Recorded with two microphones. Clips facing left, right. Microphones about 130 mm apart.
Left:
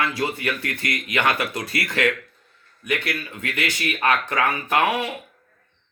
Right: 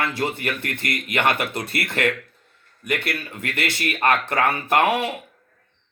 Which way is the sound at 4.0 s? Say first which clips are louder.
Right 1 dB; 60° right (ahead or behind).